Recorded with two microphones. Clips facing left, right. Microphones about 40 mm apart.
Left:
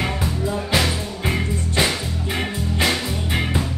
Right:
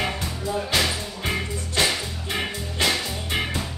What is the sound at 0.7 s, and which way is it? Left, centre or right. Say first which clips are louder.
Music: left 3 dB; centre.